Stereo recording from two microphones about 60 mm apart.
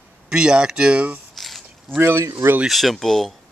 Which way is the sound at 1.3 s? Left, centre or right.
Centre.